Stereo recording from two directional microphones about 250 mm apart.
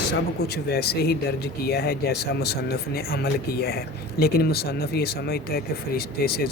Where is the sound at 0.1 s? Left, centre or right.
Left.